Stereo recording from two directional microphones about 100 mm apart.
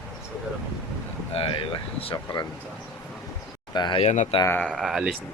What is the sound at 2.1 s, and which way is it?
Speech, 45° left (ahead or behind).